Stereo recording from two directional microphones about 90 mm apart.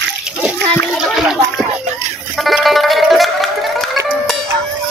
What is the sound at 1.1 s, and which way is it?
Speech, 10° right (ahead or behind).